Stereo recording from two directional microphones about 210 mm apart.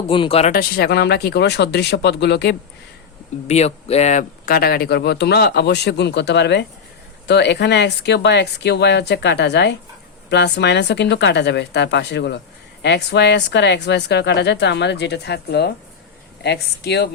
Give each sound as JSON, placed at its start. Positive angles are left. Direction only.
{"t": 0.1, "sound": "speech", "side_deg": 25}
{"t": 3.4, "sound": "speech", "side_deg": 30}